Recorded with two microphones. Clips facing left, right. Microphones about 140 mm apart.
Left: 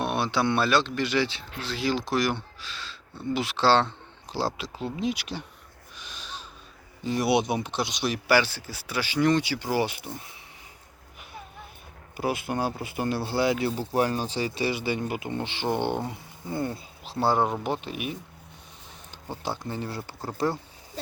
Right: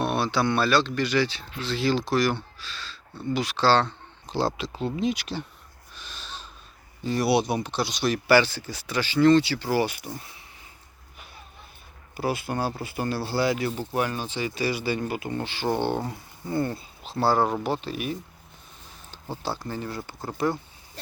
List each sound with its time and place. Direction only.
0.0 s speech: 20° left (ahead or behind)
1.6 s speech: 10° left (ahead or behind)
4.3 s speech: 5° left (ahead or behind)
6.0 s wheeze: 15° left (ahead or behind)
7.0 s speech: 15° left (ahead or behind)
12.1 s speech: 15° left (ahead or behind)
13.9 s speech: 35° left (ahead or behind); by 18.2 s 15° left (ahead or behind)
19.4 s speech: 20° left (ahead or behind)